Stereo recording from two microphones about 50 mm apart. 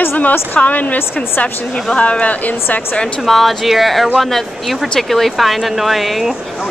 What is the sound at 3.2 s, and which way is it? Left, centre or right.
Speech, centre.